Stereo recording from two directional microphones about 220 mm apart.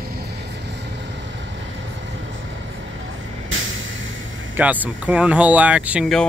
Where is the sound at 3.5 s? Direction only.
60° right (ahead or behind).